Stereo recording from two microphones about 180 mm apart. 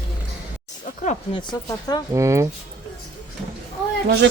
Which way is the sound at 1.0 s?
45° left (ahead or behind).